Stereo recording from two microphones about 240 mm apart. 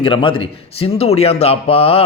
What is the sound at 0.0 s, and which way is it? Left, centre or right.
Speech, left.